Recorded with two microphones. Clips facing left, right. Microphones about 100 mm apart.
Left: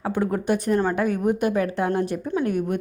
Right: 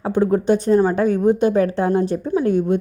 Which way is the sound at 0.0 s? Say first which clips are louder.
Right 6 dB; 25° right (ahead or behind).